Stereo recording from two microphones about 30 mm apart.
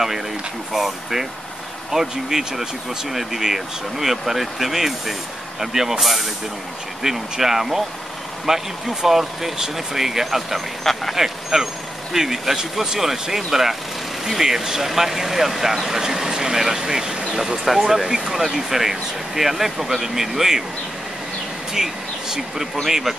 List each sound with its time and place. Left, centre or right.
0.7 s speech: centre
10.8 s a sound: centre
11.1 s speech: centre
17.6 s speech: centre
18.4 s speech: centre
21.7 s speech: centre